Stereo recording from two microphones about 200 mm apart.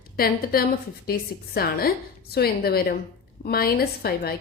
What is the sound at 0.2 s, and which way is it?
A woman's voice, 50° left (ahead or behind).